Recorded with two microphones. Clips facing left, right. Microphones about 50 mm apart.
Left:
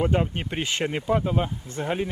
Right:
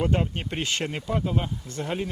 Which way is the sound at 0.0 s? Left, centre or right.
Centre.